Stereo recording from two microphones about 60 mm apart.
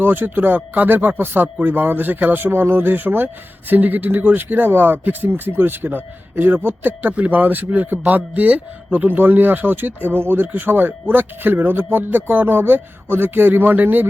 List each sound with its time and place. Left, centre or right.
0.0 s speech: right